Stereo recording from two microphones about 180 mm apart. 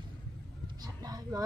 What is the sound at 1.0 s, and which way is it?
Vehicle, 20° right (ahead or behind).